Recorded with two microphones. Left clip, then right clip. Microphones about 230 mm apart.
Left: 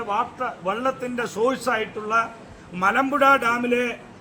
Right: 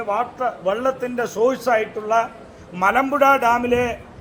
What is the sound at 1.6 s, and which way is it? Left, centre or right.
A man's voice, left.